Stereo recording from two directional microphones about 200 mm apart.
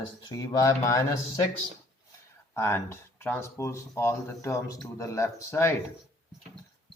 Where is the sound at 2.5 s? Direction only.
10° left (ahead or behind).